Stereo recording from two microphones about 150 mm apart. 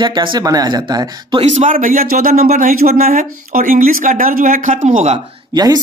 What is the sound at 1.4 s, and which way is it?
Speech, 50° right (ahead or behind).